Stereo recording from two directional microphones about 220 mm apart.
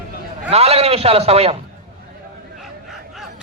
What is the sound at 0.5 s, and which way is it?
A man's voice, 25° right (ahead or behind).